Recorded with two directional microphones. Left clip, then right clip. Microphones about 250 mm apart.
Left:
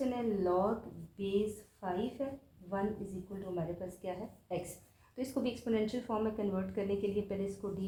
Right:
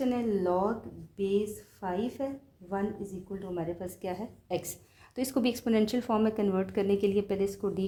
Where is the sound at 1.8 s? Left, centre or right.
Right.